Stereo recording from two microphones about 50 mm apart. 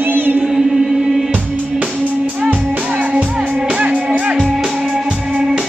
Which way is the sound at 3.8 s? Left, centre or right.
Right.